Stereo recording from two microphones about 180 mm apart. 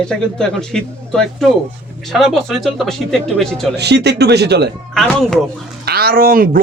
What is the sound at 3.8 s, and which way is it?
Speech, 70° right (ahead or behind).